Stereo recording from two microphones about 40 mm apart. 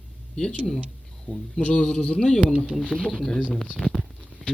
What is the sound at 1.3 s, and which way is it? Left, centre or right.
A man's voice, left.